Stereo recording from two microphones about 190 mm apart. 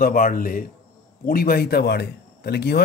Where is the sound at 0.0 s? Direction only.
45° left (ahead or behind).